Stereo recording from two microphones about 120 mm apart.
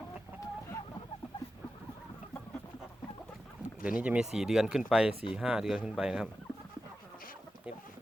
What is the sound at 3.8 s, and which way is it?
Speech, 10° right (ahead or behind).